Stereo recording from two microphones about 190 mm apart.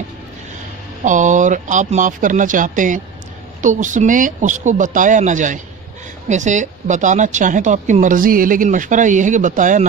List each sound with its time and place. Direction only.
1.0 s a woman's voice: 40° right (ahead or behind)